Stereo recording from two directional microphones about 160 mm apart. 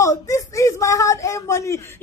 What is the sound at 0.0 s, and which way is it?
A man's voice, 20° left (ahead or behind).